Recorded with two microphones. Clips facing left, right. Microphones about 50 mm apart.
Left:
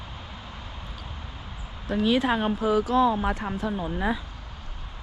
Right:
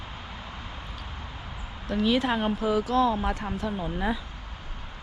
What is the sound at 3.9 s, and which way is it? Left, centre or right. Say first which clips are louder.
Speech: left 1 dB; left.